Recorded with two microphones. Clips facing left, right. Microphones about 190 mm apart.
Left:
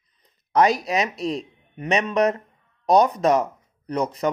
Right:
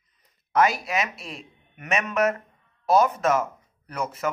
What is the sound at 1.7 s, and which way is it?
Speech, 35° left (ahead or behind).